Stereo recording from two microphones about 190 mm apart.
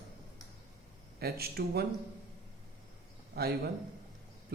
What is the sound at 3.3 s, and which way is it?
Speech, 55° right (ahead or behind).